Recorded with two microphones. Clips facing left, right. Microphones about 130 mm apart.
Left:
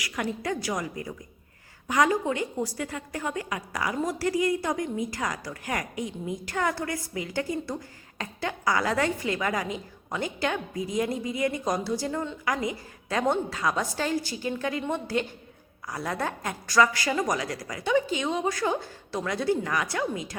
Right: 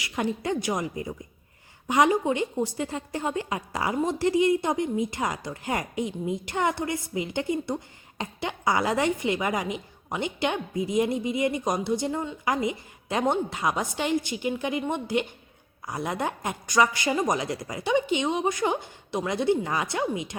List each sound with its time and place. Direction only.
0.0 s a woman's voice: 25° right (ahead or behind)